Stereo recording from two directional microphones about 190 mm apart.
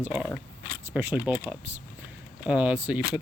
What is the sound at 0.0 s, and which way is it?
Speech, 5° right (ahead or behind).